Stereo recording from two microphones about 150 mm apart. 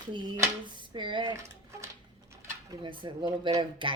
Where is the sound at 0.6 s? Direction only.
30° right (ahead or behind).